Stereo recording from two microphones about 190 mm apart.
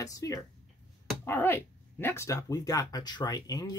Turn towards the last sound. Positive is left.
turn(degrees=20)  # may be behind; listen again after turning